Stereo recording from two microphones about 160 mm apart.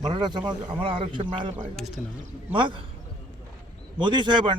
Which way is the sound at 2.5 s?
30° right (ahead or behind).